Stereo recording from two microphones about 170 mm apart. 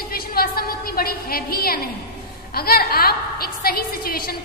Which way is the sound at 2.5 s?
65° left (ahead or behind).